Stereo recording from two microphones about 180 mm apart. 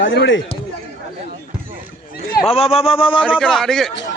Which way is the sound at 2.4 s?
35° left (ahead or behind).